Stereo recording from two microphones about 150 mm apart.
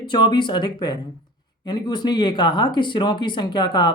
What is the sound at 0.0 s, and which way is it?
Speech, 30° left (ahead or behind).